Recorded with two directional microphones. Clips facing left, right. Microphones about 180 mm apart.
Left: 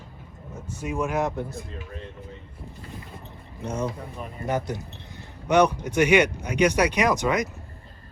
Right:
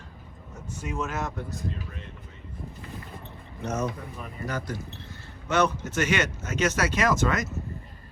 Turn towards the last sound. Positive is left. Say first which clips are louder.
# left 2 dB
turn(degrees=15)  # may be behind; listen again after turning